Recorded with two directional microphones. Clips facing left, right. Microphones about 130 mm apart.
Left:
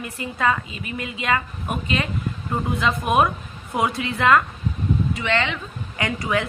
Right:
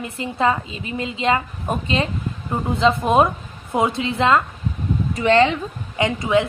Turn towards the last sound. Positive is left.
turn(degrees=-20)  # may be behind; listen again after turning